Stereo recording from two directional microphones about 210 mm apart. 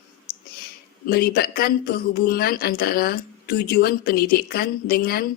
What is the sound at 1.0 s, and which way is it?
Speech, 45° left (ahead or behind).